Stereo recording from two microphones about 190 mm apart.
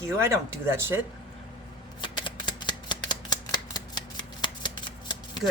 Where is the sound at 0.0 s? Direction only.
15° right (ahead or behind).